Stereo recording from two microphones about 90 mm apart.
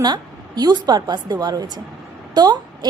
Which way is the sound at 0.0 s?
50° right (ahead or behind).